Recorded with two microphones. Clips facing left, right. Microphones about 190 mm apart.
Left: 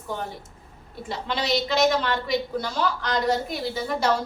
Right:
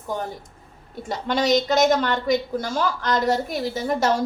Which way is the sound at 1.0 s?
45° right (ahead or behind).